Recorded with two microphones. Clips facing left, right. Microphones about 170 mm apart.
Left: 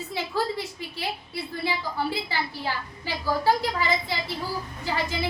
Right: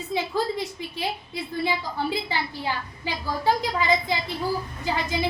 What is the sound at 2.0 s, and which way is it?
A woman's voice, 20° right (ahead or behind).